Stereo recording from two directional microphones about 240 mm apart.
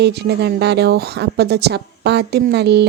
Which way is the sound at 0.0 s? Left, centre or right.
Right.